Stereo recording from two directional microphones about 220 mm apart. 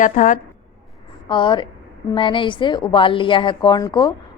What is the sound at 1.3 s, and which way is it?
A woman's voice, 20° left (ahead or behind).